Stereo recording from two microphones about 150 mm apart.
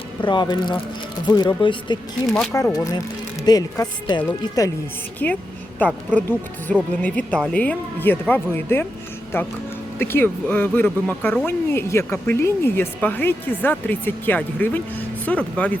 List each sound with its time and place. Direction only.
0.2 s speech: 30° left (ahead or behind)
2.5 s speech: 20° left (ahead or behind)
5.2 s speech: 10° left (ahead or behind)